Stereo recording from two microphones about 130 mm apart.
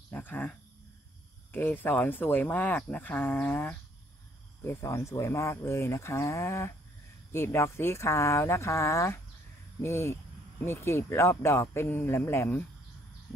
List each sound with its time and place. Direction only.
0.1 s cricket: 15° left (ahead or behind)
1.5 s speech: 15° left (ahead or behind)